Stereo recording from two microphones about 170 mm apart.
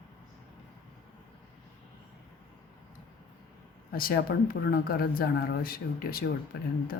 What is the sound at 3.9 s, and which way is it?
Speech, 60° left (ahead or behind).